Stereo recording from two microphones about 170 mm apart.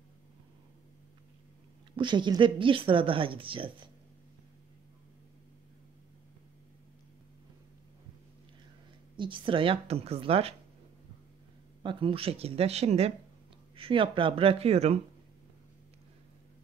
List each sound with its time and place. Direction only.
2.0 s speech: 25° right (ahead or behind)
9.1 s speech: 30° right (ahead or behind)
11.8 s speech: 30° right (ahead or behind)